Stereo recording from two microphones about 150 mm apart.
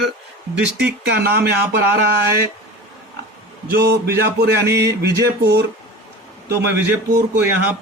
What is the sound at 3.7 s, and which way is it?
Speech, 90° right.